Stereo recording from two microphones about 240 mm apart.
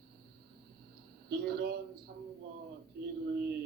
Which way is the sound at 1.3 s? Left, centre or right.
Right.